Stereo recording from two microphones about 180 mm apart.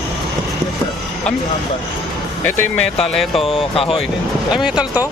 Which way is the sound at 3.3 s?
30° left (ahead or behind).